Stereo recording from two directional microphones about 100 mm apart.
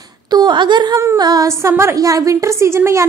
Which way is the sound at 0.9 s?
40° right (ahead or behind).